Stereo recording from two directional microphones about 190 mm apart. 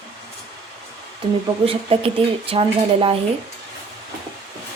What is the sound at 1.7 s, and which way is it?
A woman's voice, 30° right (ahead or behind).